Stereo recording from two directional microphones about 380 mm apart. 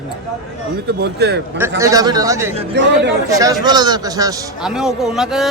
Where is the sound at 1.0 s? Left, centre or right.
Right.